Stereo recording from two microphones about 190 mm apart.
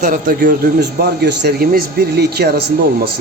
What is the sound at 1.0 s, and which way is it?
A man's voice, 60° right (ahead or behind).